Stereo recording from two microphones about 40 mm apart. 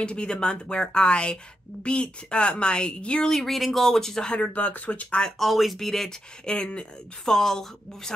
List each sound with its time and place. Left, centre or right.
0.0 s a woman's voice: left
3.3 s speech: centre
4.5 s speech: left
5.4 s speech: centre
6.0 s a woman's voice: left
7.2 s speech: centre